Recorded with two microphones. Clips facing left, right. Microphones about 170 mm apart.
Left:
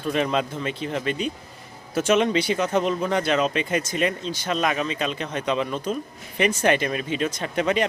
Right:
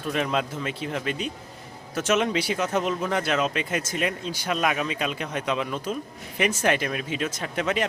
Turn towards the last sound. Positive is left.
turn(degrees=0)  # may be behind; listen again after turning